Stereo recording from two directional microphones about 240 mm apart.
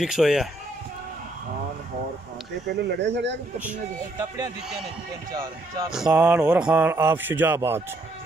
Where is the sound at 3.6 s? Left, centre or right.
Centre.